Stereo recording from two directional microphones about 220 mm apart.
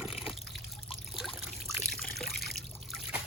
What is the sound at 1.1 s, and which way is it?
Trickle, centre (ahead or behind).